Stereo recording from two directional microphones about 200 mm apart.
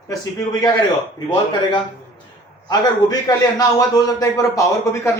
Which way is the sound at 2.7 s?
20° left (ahead or behind).